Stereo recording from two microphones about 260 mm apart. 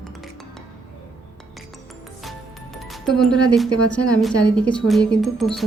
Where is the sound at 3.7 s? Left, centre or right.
Right.